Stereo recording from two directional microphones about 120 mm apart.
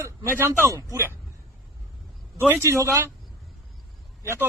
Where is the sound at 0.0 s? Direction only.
20° right (ahead or behind).